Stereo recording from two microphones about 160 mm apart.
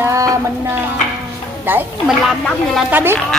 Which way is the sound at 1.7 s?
15° right (ahead or behind).